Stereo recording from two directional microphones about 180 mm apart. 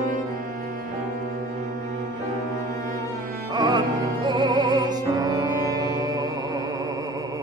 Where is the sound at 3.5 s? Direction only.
25° right (ahead or behind).